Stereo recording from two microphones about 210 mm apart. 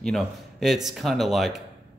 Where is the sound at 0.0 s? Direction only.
Centre (ahead or behind).